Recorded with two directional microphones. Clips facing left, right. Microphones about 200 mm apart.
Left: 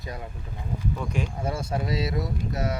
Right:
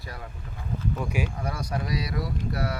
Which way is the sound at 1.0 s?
10° right (ahead or behind).